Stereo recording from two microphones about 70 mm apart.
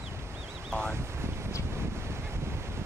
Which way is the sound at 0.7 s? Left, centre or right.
Centre.